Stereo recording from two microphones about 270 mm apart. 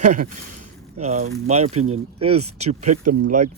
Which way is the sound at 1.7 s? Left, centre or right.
Right.